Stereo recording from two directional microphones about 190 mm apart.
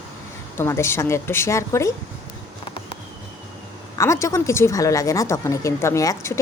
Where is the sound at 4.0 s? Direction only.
15° left (ahead or behind).